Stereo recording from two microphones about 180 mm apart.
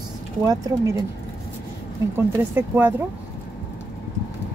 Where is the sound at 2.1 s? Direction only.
10° right (ahead or behind).